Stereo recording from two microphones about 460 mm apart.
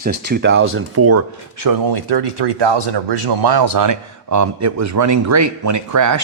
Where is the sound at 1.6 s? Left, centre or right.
Right.